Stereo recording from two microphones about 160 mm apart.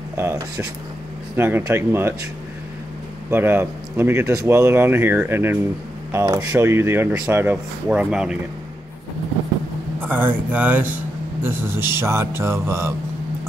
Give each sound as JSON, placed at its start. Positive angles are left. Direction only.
{"t": 1.3, "sound": "speech", "side_deg": -15}
{"t": 3.3, "sound": "speech", "side_deg": -15}
{"t": 9.9, "sound": "speech", "side_deg": -10}